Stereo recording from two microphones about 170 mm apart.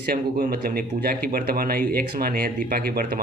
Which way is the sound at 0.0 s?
60° right (ahead or behind).